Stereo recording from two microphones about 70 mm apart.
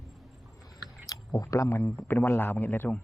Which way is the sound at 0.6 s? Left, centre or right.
Left.